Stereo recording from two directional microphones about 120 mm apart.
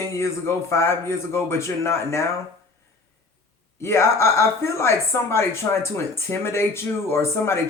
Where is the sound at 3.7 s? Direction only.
20° left (ahead or behind).